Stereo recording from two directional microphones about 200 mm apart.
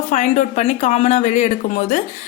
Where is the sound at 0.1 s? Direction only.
35° left (ahead or behind).